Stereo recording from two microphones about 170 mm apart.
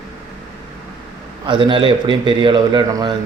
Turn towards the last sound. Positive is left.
turn(degrees=-25)  # may be behind; listen again after turning